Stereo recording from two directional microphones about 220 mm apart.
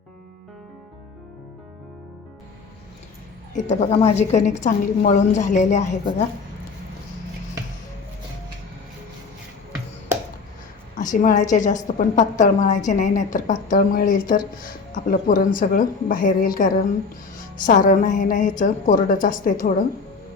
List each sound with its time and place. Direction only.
3.5 s a woman's voice: 30° left (ahead or behind)
11.1 s a woman's voice: 35° left (ahead or behind)